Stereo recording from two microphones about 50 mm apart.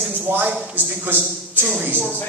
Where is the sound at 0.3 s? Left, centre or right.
Right.